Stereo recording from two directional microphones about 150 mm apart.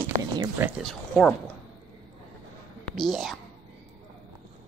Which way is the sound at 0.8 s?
Centre (ahead or behind).